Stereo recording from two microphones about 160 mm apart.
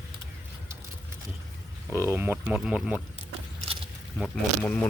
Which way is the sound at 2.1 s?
10° right (ahead or behind).